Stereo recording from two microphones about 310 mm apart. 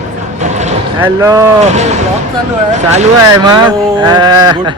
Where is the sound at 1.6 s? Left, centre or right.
Right.